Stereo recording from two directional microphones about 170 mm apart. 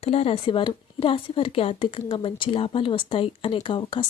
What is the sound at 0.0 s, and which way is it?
A woman's voice, 35° left (ahead or behind).